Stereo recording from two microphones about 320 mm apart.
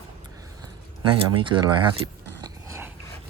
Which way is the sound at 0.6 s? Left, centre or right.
Centre.